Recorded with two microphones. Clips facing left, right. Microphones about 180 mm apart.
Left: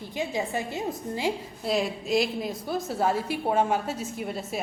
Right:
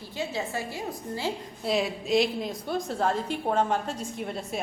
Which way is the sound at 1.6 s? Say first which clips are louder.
Even; centre (ahead or behind).